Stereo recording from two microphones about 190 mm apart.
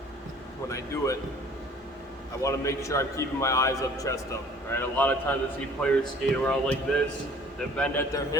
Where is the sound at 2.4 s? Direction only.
15° left (ahead or behind).